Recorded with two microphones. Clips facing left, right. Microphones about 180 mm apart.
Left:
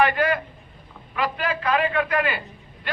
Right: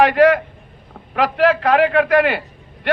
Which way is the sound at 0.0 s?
80° right.